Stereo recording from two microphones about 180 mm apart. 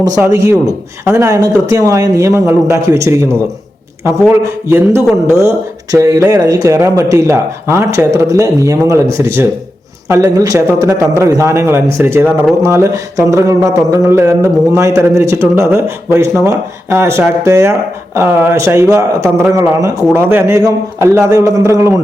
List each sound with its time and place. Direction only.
0.0 s speech: 20° right (ahead or behind)
0.4 s speech: 10° right (ahead or behind)